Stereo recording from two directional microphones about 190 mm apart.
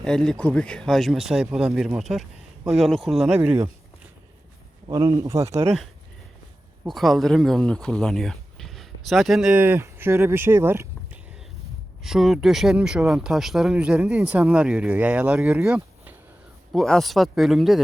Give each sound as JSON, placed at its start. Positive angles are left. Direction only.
{"t": 0.0, "sound": "speech", "side_deg": 5}
{"t": 4.9, "sound": "speech", "side_deg": -20}
{"t": 6.8, "sound": "speech", "side_deg": 0}
{"t": 12.0, "sound": "speech", "side_deg": 0}